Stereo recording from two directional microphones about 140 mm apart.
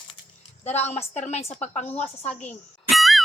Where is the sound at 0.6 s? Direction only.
50° left (ahead or behind).